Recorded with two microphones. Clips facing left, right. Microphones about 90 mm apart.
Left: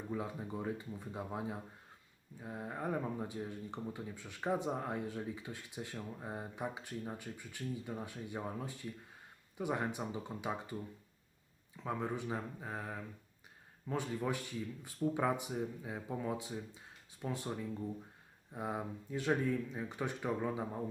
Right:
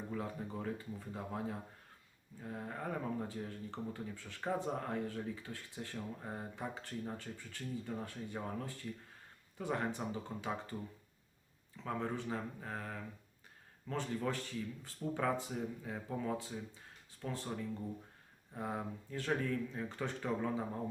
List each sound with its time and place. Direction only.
0.1 s speech: 15° left (ahead or behind)
11.8 s speech: 15° left (ahead or behind)
18.5 s speech: 15° left (ahead or behind)